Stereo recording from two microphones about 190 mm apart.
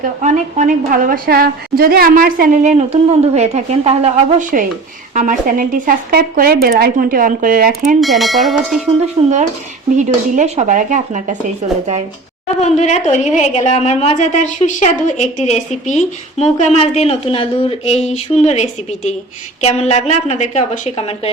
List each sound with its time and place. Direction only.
0.2 s a woman's voice: 40° right (ahead or behind)
8.0 s bell: centre (ahead or behind)
9.2 s speech: 30° right (ahead or behind)
12.5 s a woman's voice: 35° left (ahead or behind)